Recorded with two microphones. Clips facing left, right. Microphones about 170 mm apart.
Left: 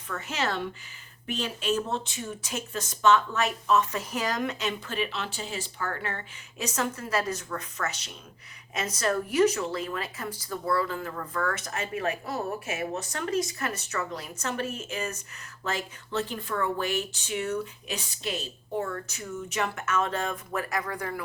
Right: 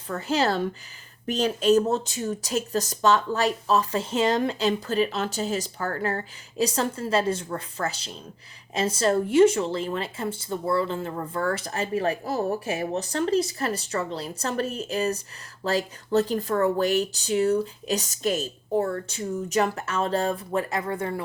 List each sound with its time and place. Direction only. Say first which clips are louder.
0.1 s speech: right 7 dB; 35° right (ahead or behind)